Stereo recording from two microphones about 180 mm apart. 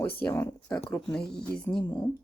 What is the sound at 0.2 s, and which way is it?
Speech, 10° left (ahead or behind).